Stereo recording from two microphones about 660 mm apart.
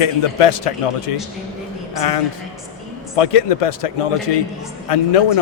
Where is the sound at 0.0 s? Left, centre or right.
Left.